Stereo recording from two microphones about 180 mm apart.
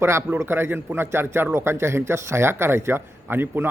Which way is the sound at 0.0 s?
15° right (ahead or behind).